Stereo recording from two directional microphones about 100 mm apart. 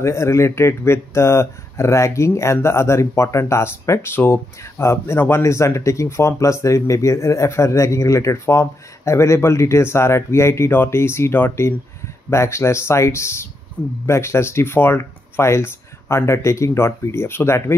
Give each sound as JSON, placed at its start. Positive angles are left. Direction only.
{"t": 0.0, "sound": "speech", "side_deg": 30}